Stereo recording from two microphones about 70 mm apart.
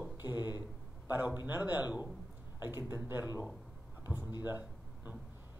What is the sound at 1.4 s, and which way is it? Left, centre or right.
A man's voice, right.